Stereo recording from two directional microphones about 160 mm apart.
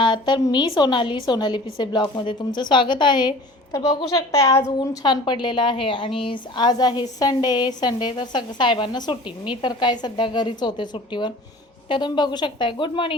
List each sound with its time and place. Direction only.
0.0 s a woman's voice: 30° left (ahead or behind)